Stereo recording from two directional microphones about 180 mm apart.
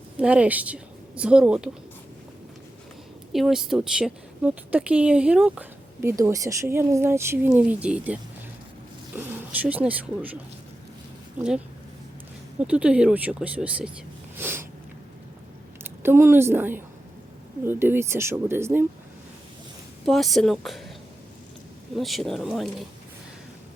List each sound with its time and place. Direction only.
0.2 s speech: 5° right (ahead or behind)
3.3 s speech: centre (ahead or behind)
14.3 s a sound: 10° right (ahead or behind)
15.8 s speech: 15° right (ahead or behind)
20.1 s speech: centre (ahead or behind)
21.9 s speech: centre (ahead or behind)